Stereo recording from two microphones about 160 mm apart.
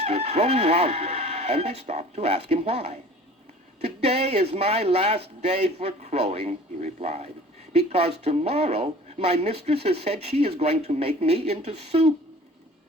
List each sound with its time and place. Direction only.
0.0 s speech: 40° right (ahead or behind)